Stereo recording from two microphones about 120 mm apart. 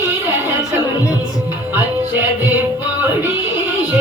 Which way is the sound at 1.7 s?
15° right (ahead or behind).